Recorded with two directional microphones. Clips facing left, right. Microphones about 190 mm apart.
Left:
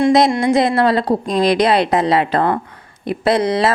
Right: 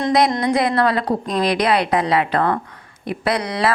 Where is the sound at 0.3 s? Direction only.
25° left (ahead or behind).